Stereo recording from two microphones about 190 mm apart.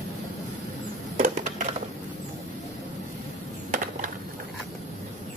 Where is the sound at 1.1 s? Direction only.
40° right (ahead or behind).